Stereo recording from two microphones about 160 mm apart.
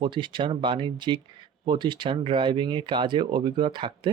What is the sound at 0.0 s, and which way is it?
Speech, 30° right (ahead or behind).